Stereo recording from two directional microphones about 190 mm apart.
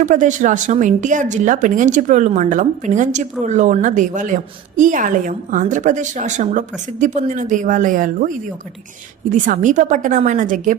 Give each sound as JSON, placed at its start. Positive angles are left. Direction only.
{"t": 0.0, "sound": "a woman's voice", "side_deg": -40}